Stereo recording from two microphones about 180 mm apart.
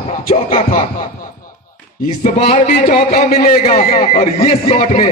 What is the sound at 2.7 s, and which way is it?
Speech, 65° left (ahead or behind).